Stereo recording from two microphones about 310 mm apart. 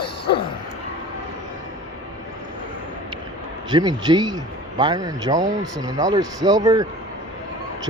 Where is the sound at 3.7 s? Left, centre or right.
Centre.